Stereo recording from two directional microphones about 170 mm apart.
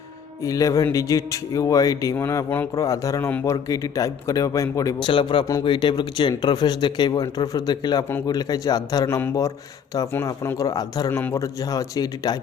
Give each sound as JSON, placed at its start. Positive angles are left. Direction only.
{"t": 0.4, "sound": "speech", "side_deg": 20}